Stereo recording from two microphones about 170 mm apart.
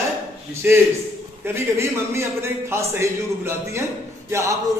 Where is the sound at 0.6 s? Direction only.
10° right (ahead or behind).